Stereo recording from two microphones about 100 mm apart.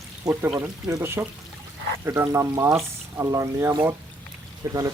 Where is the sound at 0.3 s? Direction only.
40° right (ahead or behind).